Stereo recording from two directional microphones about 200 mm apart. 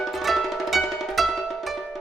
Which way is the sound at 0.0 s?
Centre (ahead or behind).